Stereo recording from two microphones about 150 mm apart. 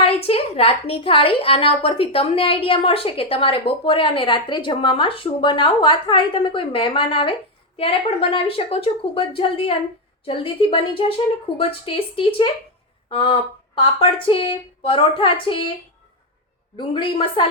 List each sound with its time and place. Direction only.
0.0 s a woman's voice: 40° left (ahead or behind)
16.7 s a woman's voice: 35° left (ahead or behind)